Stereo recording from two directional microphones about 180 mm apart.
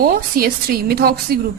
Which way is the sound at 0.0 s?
55° right (ahead or behind).